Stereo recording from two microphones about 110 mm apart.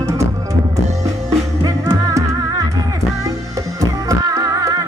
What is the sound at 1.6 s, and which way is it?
Music, 35° right (ahead or behind).